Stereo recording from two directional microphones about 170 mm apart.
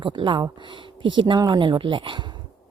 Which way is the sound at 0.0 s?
30° right (ahead or behind).